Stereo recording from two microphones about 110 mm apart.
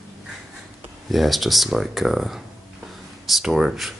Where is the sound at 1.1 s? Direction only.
Centre (ahead or behind).